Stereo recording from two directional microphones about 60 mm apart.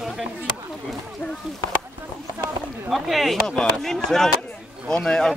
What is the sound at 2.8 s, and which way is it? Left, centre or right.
A woman's voice, centre.